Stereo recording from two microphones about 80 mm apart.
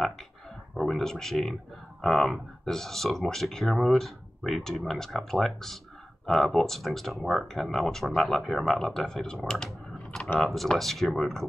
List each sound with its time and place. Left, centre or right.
0.7 s speech: centre